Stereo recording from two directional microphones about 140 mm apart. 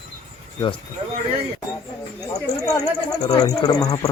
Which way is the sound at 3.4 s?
25° left (ahead or behind).